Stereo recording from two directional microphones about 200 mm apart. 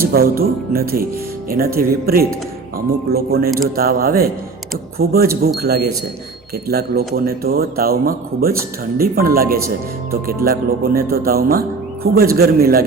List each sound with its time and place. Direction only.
0.1 s speech: 50° right (ahead or behind)